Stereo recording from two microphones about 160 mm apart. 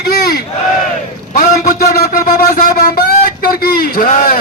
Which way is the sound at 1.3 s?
65° left (ahead or behind).